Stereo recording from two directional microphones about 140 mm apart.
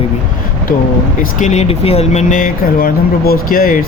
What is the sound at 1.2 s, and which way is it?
Speech, 60° left (ahead or behind).